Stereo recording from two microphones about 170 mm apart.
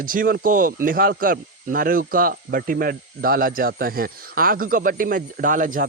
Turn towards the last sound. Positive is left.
turn(degrees=-50)  # may be behind; listen again after turning